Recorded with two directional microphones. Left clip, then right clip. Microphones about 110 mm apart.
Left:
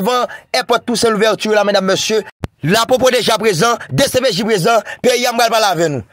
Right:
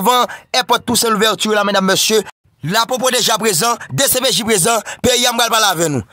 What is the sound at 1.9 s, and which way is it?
Speech, 20° right (ahead or behind).